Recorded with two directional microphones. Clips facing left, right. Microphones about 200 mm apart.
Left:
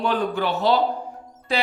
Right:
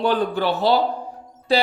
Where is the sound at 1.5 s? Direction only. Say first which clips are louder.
Right 5 dB; 35° right (ahead or behind).